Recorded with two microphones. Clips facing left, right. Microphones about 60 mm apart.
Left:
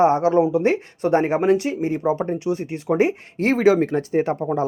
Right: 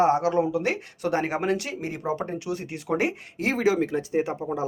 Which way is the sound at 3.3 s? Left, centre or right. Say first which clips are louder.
Left 7 dB; left.